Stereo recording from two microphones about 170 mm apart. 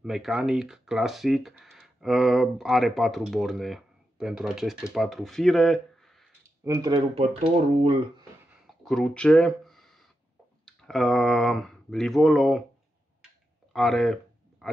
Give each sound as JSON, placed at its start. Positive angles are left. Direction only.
{"t": 0.0, "sound": "speech", "side_deg": 0}
{"t": 6.6, "sound": "speech", "side_deg": -20}
{"t": 7.2, "sound": "speech", "side_deg": -35}
{"t": 8.6, "sound": "a sound", "side_deg": 5}
{"t": 10.6, "sound": "speech", "side_deg": 5}
{"t": 13.7, "sound": "a sound", "side_deg": 0}